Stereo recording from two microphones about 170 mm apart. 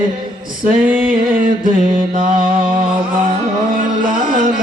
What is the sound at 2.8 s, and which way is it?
Music, 30° right (ahead or behind).